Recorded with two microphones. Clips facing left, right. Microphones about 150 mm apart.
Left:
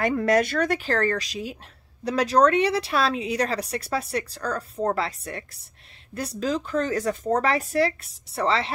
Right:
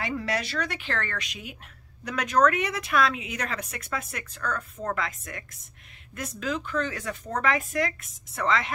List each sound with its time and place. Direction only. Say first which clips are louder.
0.0 s speech: left 9 dB; 50° left (ahead or behind); by 8.7 s 30° left (ahead or behind)